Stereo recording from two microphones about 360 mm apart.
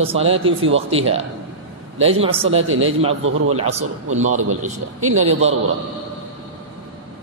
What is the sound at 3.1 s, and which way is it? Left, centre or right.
A man's voice, right.